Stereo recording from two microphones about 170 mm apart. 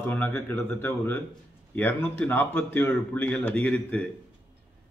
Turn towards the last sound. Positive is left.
turn(degrees=10)  # may be behind; listen again after turning